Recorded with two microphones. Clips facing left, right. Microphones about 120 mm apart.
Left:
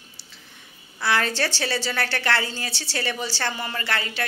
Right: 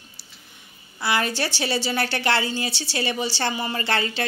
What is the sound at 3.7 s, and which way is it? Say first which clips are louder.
Speech: right 3 dB; 30° right (ahead or behind).